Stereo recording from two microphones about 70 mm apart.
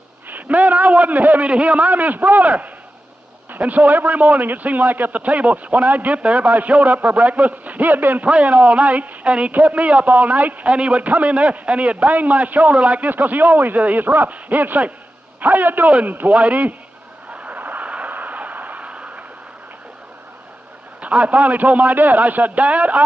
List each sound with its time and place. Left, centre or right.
0.3 s a man's voice: right
17.3 s vehicle: right
21.0 s speech: centre